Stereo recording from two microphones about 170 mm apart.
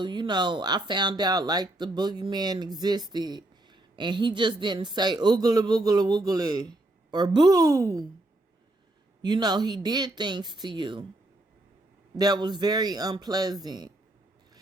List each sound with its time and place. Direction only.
0.0 s speech: 25° right (ahead or behind)
9.2 s speech: 25° right (ahead or behind)
12.1 s speech: 25° right (ahead or behind)